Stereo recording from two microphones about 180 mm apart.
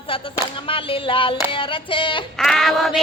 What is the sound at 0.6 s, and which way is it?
Music, 30° left (ahead or behind).